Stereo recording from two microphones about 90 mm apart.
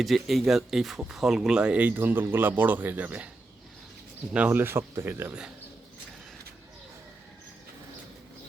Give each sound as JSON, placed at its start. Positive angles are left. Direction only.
{"t": 0.0, "sound": "speech", "side_deg": 0}
{"t": 4.3, "sound": "speech", "side_deg": -15}